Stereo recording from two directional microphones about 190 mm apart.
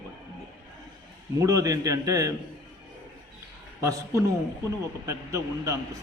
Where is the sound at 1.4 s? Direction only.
15° right (ahead or behind).